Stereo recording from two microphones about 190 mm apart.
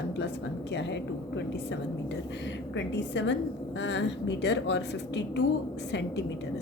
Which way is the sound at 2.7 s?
70° left (ahead or behind).